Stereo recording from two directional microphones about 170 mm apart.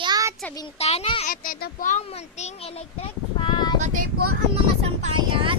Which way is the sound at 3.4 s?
25° left (ahead or behind).